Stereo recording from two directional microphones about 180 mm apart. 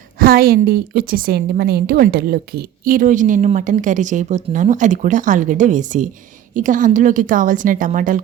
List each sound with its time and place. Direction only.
0.2 s a woman's voice: 55° right (ahead or behind)